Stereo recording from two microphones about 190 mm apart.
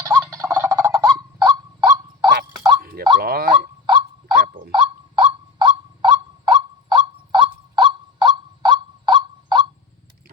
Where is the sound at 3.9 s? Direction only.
25° right (ahead or behind).